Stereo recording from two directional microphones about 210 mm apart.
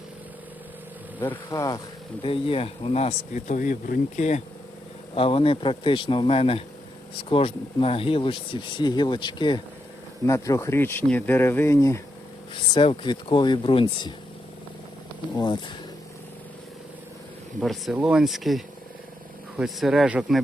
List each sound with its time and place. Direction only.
1.2 s speech: 10° left (ahead or behind)
15.4 s speech: 20° left (ahead or behind)
17.6 s speech: centre (ahead or behind)